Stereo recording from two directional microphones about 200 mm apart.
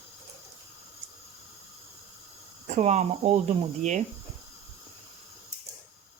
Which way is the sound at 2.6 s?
35° right (ahead or behind).